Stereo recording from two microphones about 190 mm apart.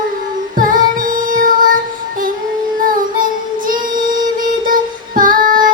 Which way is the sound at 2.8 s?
45° right (ahead or behind).